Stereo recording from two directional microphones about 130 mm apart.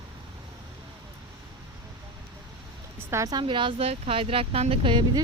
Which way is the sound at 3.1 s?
25° right (ahead or behind).